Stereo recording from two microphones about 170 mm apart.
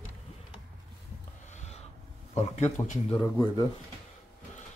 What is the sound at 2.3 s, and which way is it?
Speech, 40° left (ahead or behind).